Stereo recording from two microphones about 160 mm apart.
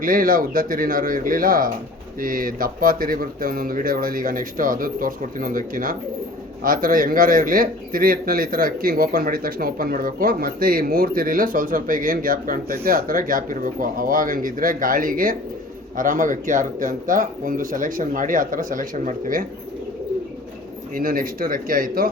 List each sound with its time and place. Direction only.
0.0 s a man's voice: 60° right (ahead or behind)
20.9 s a man's voice: 65° right (ahead or behind)